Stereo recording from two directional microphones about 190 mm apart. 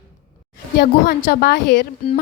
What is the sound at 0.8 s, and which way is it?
Speech, 55° left (ahead or behind).